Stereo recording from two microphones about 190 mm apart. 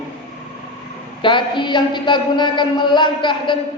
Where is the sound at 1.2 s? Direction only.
25° left (ahead or behind).